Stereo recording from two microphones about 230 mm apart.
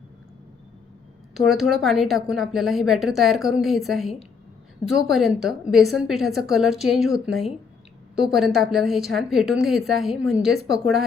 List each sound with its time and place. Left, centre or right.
1.3 s a woman's voice: centre